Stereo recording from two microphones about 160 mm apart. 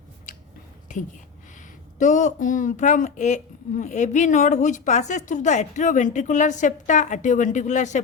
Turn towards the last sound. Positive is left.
turn(degrees=50)  # may be behind; listen again after turning